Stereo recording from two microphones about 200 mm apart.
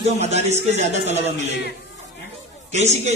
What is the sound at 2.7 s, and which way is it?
Speech, 35° right (ahead or behind).